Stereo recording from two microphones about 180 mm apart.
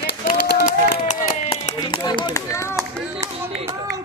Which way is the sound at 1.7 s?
25° left (ahead or behind).